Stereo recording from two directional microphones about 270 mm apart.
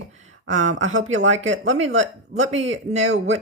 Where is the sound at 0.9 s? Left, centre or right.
Right.